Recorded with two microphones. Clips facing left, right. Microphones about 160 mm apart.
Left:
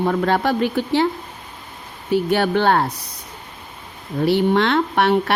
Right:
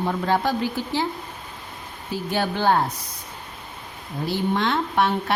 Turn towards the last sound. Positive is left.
turn(degrees=70)  # may be behind; listen again after turning